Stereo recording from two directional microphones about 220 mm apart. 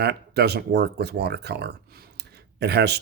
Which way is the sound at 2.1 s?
50° right (ahead or behind).